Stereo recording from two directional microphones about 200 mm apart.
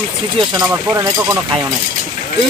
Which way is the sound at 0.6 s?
15° right (ahead or behind).